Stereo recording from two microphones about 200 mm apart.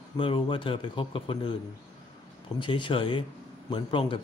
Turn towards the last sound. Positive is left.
turn(degrees=25)  # may be behind; listen again after turning